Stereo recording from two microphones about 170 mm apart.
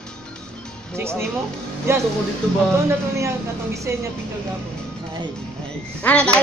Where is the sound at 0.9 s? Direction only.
15° right (ahead or behind).